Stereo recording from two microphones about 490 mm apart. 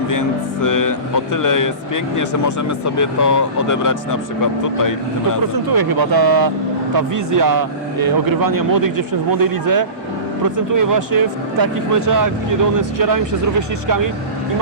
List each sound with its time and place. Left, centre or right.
0.1 s speech: left
5.6 s speech: right